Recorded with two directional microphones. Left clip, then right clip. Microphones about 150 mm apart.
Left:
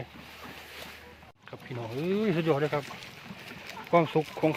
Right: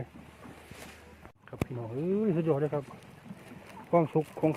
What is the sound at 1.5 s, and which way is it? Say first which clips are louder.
Rowboat: right 8 dB; 5° left (ahead or behind).